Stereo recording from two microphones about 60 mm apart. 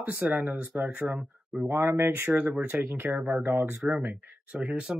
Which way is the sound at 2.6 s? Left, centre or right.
Right.